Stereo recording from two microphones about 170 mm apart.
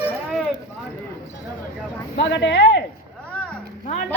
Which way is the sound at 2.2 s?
90° left.